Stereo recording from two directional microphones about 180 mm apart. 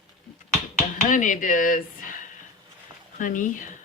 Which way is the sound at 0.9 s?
45° left (ahead or behind).